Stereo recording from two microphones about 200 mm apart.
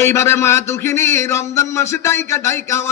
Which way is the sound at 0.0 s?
15° left (ahead or behind).